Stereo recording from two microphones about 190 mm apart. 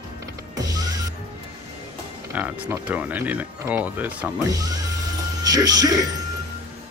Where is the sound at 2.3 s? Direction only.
10° right (ahead or behind).